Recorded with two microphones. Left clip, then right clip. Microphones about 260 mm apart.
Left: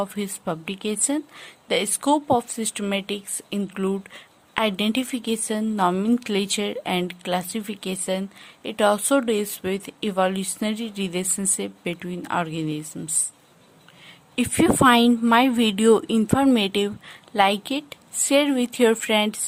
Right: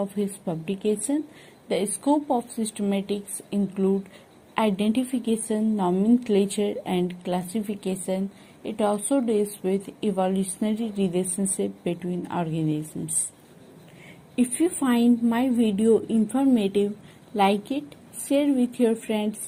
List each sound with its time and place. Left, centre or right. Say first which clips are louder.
0.2 s a woman's voice: left 1 dB; left
14.3 s a woman's voice: left 5 dB; left